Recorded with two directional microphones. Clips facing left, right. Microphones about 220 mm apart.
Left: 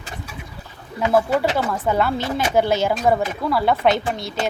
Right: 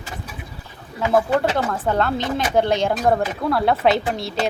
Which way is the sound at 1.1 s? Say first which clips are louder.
Even; 5° left (ahead or behind).